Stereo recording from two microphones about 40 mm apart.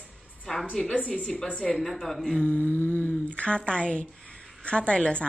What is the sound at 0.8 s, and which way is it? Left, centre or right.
Speech, left.